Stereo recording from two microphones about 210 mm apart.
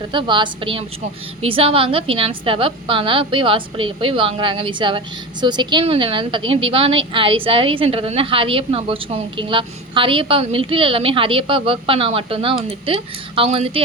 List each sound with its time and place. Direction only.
0.1 s a woman's voice: 20° right (ahead or behind)